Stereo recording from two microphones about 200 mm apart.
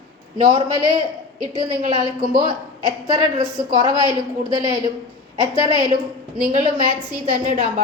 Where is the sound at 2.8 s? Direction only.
20° right (ahead or behind).